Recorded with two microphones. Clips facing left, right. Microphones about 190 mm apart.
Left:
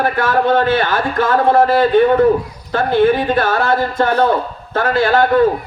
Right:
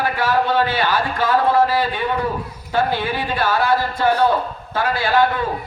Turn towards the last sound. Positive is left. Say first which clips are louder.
# left 5 dB
turn(degrees=50)  # may be behind; listen again after turning